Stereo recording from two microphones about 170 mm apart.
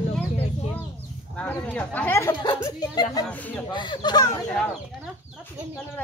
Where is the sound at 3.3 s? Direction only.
10° left (ahead or behind).